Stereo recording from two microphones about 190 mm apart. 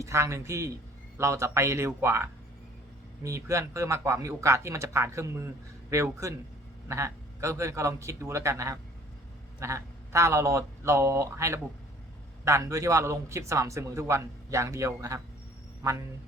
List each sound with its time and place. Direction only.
0.0 s a man's voice: 15° right (ahead or behind)